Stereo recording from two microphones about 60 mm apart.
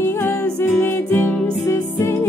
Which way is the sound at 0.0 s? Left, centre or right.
Left.